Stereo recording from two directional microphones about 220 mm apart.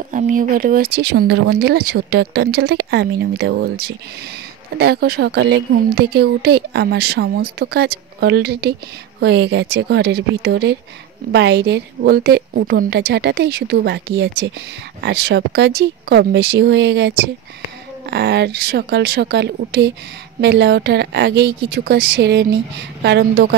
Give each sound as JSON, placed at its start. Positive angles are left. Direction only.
{"t": 0.1, "sound": "speech", "side_deg": -35}
{"t": 18.1, "sound": "speech", "side_deg": -50}